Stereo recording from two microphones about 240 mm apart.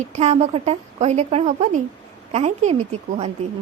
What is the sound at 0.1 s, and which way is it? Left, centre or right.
Speech, right.